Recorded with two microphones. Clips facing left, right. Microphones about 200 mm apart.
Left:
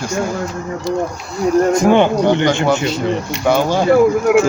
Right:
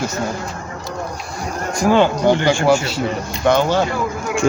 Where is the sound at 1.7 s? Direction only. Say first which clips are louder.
Right 2 dB; 20° left (ahead or behind).